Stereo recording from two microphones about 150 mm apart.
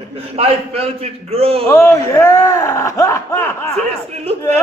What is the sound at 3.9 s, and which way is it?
Speech, 45° right (ahead or behind).